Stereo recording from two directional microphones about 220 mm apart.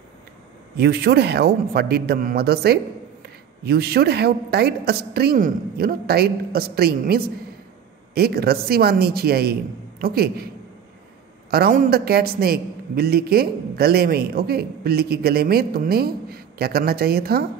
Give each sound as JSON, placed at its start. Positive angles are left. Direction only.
{"t": 0.7, "sound": "a man's voice", "side_deg": -45}
{"t": 11.5, "sound": "a man's voice", "side_deg": -40}